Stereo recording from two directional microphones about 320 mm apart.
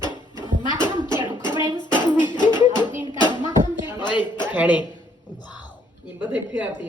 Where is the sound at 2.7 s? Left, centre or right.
Centre.